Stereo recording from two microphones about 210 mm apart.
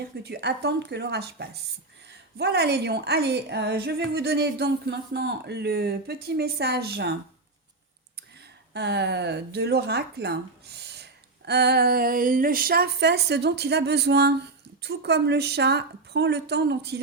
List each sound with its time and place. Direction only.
0.2 s speech: 50° right (ahead or behind)
8.7 s speech: 55° right (ahead or behind)